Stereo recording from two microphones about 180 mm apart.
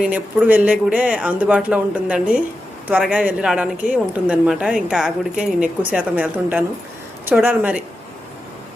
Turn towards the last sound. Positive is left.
turn(degrees=-10)  # may be behind; listen again after turning